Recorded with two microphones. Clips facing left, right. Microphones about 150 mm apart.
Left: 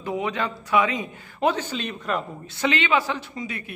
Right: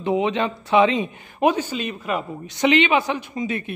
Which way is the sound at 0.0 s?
20° right (ahead or behind).